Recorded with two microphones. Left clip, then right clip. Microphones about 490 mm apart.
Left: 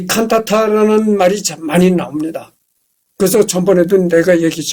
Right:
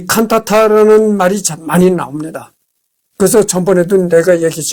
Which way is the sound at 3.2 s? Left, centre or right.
Right.